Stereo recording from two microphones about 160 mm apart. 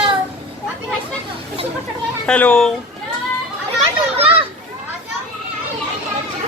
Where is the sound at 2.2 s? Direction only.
5° left (ahead or behind).